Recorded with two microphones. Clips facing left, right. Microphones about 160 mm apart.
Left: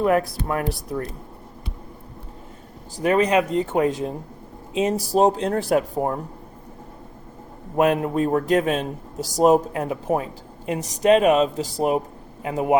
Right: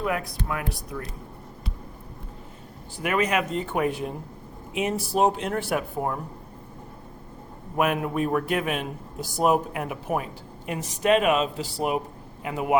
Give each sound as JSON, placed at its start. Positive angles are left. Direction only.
{"t": 0.0, "sound": "speech", "side_deg": 45}
{"t": 3.0, "sound": "speech", "side_deg": 30}
{"t": 7.8, "sound": "speech", "side_deg": 35}